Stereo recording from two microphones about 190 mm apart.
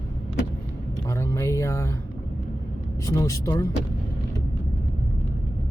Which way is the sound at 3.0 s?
15° left (ahead or behind).